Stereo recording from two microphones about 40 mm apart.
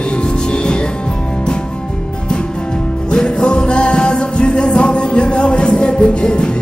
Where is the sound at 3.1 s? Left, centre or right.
Centre.